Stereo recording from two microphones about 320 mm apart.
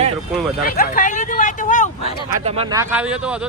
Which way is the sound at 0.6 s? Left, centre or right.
Left.